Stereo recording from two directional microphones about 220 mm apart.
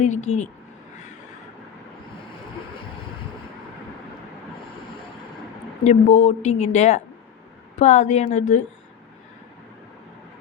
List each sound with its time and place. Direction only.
0.0 s a woman's voice: 35° left (ahead or behind)
5.8 s a woman's voice: 30° left (ahead or behind)